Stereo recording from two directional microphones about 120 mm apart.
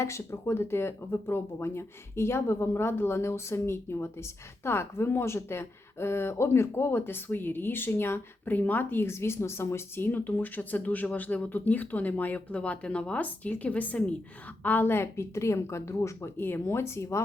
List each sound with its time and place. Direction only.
0.0 s speech: 25° left (ahead or behind)